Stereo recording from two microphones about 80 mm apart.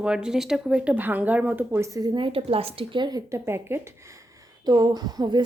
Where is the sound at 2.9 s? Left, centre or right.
Right.